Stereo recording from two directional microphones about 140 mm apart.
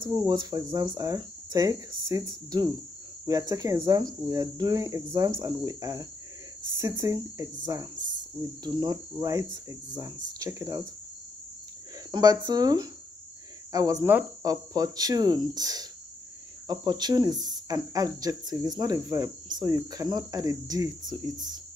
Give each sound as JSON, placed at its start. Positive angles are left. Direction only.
{"t": 0.0, "sound": "speech", "side_deg": -25}
{"t": 12.1, "sound": "speech", "side_deg": -25}